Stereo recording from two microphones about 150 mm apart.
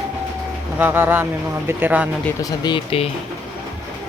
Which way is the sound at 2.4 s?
25° left (ahead or behind).